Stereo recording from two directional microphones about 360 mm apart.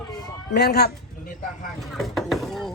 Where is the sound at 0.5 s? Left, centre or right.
Left.